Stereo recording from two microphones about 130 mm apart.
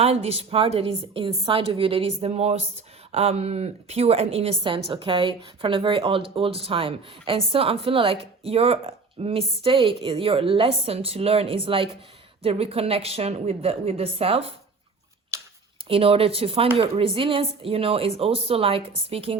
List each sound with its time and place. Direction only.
0.0 s a woman's voice: 50° right (ahead or behind)
15.3 s a sound: 20° right (ahead or behind)
15.9 s a woman's voice: 45° right (ahead or behind)